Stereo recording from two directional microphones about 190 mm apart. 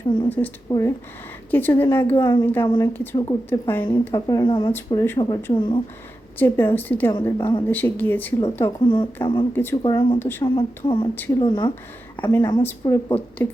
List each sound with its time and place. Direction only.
0.3 s a woman's voice: 10° left (ahead or behind)
2.6 s speech: 25° left (ahead or behind)
2.9 s speech: 10° left (ahead or behind); by 4.7 s 25° left (ahead or behind)
4.7 s speech: 15° left (ahead or behind)
6.4 s speech: 10° left (ahead or behind)
7.1 s speech: 20° left (ahead or behind)
7.7 s speech: 10° left (ahead or behind)
8.8 s speech: 25° left (ahead or behind)
9.5 s speech: 10° left (ahead or behind)
9.8 s speech: 25° left (ahead or behind)
10.2 s speech: 10° left (ahead or behind)
10.4 s speech: 25° left (ahead or behind)
12.2 s speech: 15° left (ahead or behind)